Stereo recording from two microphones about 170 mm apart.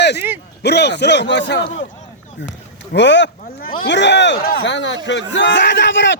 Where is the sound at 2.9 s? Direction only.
90° left.